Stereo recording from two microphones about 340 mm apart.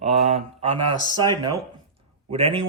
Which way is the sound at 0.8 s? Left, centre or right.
Right.